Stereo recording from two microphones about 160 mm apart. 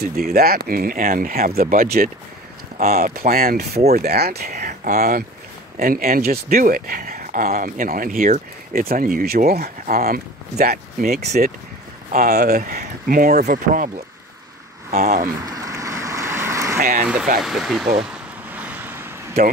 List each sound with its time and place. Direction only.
0.0 s speech: 70° right (ahead or behind)
4.8 s speech: 60° right (ahead or behind)
11.4 s speech: 60° right (ahead or behind)
14.9 s speech: 45° right (ahead or behind)
15.4 s vehicle: 20° right (ahead or behind)
17.0 s speech: 10° right (ahead or behind)
18.5 s a sound: 10° right (ahead or behind)